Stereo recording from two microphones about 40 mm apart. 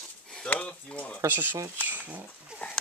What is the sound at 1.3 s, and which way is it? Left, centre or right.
Speech, right.